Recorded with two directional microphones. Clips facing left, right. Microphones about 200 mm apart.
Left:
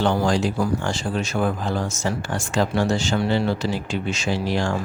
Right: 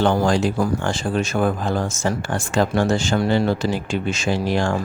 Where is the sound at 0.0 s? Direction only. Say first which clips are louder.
Right 2 dB; 50° right (ahead or behind).